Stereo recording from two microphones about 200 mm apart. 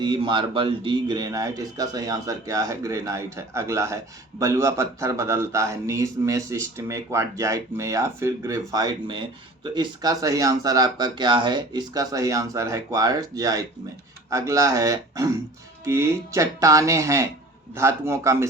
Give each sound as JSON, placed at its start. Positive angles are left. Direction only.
{"t": 0.0, "sound": "a man's voice", "side_deg": -25}